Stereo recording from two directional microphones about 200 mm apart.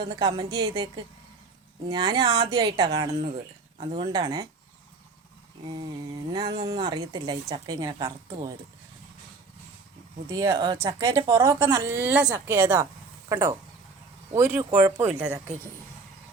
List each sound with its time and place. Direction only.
0.0 s speech: 20° right (ahead or behind)
5.6 s speech: 20° right (ahead or behind)
10.2 s a woman's voice: 15° right (ahead or behind)